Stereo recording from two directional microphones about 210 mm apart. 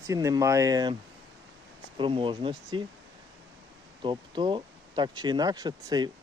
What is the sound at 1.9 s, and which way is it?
Speech, 25° right (ahead or behind).